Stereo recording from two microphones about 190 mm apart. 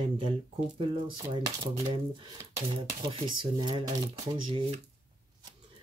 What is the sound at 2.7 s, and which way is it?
Speech, 25° right (ahead or behind).